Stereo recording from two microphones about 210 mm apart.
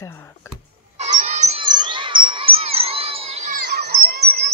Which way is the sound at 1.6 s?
20° right (ahead or behind).